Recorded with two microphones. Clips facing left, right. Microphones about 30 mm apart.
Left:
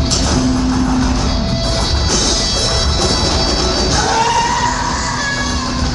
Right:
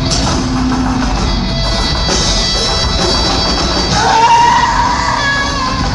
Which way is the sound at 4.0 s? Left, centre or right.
Centre.